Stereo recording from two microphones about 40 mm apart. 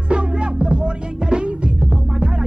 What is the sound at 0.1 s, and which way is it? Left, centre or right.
Music, right.